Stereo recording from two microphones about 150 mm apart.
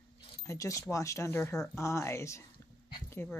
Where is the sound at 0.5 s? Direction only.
20° left (ahead or behind).